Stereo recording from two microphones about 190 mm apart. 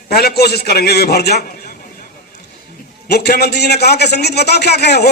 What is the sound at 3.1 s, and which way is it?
A man's voice, 55° left (ahead or behind).